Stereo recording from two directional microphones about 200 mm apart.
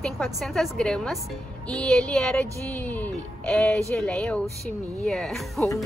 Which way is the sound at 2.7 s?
10° left (ahead or behind).